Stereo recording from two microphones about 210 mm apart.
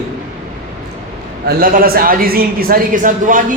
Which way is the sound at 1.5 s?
45° right (ahead or behind).